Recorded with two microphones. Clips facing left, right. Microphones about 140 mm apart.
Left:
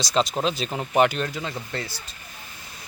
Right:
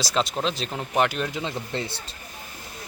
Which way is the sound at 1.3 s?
20° right (ahead or behind).